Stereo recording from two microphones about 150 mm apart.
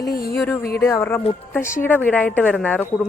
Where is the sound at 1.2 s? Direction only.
40° left (ahead or behind).